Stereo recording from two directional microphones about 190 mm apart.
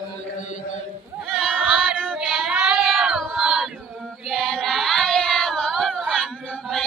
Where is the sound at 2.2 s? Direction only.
5° right (ahead or behind).